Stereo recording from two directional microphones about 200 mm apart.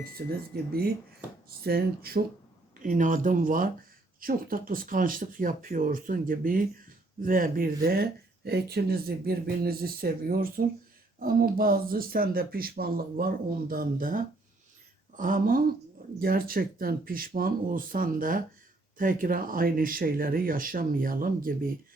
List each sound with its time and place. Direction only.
0.0 s speech: 50° right (ahead or behind)